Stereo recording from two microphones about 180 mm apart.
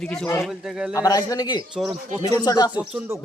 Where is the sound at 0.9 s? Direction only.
20° left (ahead or behind).